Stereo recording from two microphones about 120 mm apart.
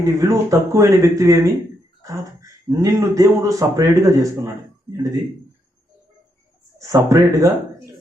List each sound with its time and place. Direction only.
0.0 s a man's voice: 30° right (ahead or behind)
6.7 s speech: 25° right (ahead or behind)